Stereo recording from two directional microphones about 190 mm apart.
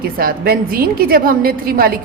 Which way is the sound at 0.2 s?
50° right (ahead or behind).